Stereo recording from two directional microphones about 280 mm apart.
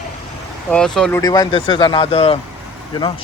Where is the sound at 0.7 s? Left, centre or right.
Centre.